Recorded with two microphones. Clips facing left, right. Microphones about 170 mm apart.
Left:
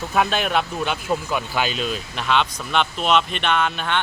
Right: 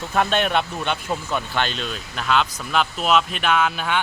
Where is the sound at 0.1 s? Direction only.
5° left (ahead or behind).